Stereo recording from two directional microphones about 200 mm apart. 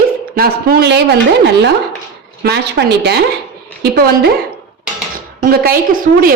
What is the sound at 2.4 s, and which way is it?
A woman's voice, 55° right (ahead or behind).